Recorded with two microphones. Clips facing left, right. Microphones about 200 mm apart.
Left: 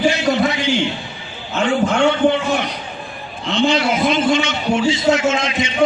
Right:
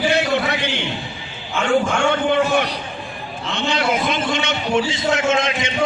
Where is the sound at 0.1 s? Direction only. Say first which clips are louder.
Left 2 dB; 60° right (ahead or behind).